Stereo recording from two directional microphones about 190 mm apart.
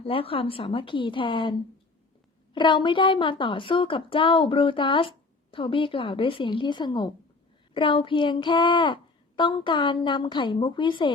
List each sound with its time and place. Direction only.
0.0 s a woman's voice: 30° left (ahead or behind)
2.6 s a woman's voice: 25° left (ahead or behind)